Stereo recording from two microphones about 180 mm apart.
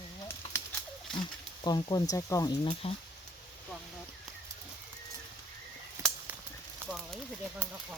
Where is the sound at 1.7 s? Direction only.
25° left (ahead or behind).